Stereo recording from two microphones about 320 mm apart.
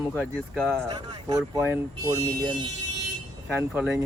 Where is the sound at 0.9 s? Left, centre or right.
Centre.